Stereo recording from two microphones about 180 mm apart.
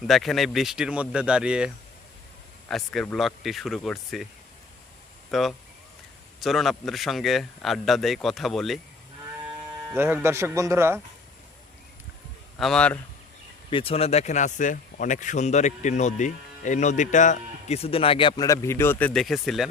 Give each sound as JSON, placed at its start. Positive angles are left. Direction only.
{"t": 0.1, "sound": "speech", "side_deg": 0}
{"t": 5.3, "sound": "speech", "side_deg": 0}
{"t": 9.9, "sound": "speech", "side_deg": -10}
{"t": 12.5, "sound": "speech", "side_deg": 5}
{"t": 13.7, "sound": "speech", "side_deg": 30}